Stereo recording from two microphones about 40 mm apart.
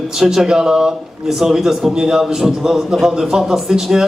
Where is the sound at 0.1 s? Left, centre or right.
Centre.